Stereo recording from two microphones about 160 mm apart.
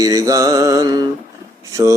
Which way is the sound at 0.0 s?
20° right (ahead or behind).